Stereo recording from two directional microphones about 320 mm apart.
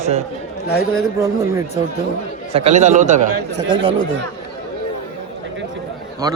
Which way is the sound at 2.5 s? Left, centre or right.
Centre.